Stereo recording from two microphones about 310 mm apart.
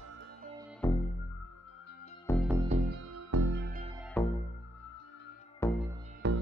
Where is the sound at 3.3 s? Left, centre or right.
Right.